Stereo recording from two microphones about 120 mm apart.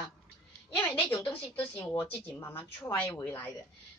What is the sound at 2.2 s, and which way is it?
A woman's voice, 15° left (ahead or behind).